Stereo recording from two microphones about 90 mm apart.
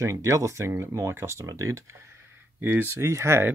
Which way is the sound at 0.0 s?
35° right (ahead or behind).